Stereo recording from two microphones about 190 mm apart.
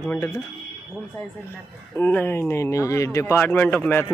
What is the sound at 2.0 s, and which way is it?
Speech, 10° left (ahead or behind).